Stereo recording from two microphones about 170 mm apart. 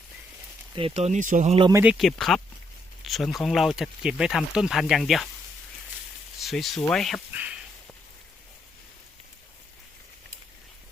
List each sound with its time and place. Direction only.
0.7 s speech: 35° right (ahead or behind)
1.7 s speech: 5° right (ahead or behind)
6.4 s speech: centre (ahead or behind)
7.3 s a sound: 10° right (ahead or behind)